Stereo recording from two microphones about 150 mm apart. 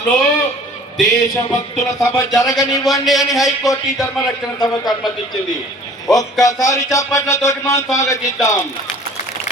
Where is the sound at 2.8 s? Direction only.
Centre (ahead or behind).